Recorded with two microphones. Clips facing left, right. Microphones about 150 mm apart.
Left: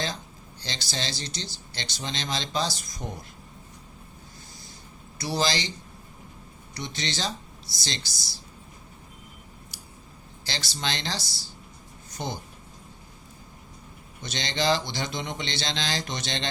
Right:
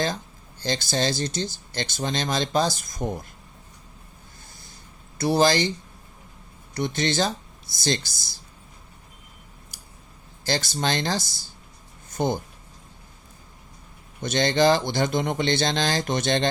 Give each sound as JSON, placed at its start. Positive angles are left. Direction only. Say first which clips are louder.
{"t": 0.6, "sound": "speech", "louder": "right 9 dB", "side_deg": -50}
{"t": 5.1, "sound": "speech", "louder": "right 8 dB", "side_deg": -55}
{"t": 6.7, "sound": "speech", "louder": "right 9 dB", "side_deg": -55}
{"t": 9.7, "sound": "scissors", "louder": "left 2 dB", "side_deg": -50}
{"t": 10.4, "sound": "speech", "louder": "right 7 dB", "side_deg": -50}
{"t": 14.2, "sound": "speech", "louder": "right 9 dB", "side_deg": -50}